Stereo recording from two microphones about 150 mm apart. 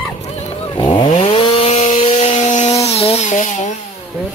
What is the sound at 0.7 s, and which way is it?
Chainsaw, 35° left (ahead or behind).